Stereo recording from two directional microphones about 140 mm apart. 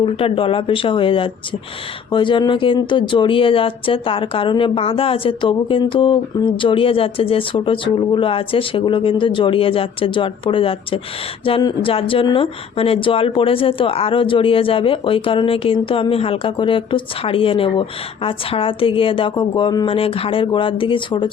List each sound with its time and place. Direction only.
0.0 s speech: 40° left (ahead or behind)